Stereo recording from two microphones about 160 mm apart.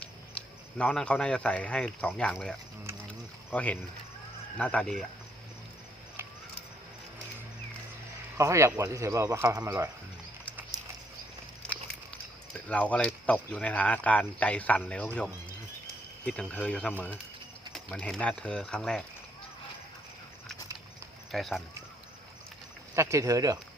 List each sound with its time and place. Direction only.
0.0 s speech: 5° left (ahead or behind)
3.1 s a sound: 10° left (ahead or behind)
4.5 s speech: 10° left (ahead or behind)
8.4 s speech: 20° right (ahead or behind)
12.6 s speech: 10° left (ahead or behind)
21.3 s speech: centre (ahead or behind)
23.0 s speech: 20° right (ahead or behind)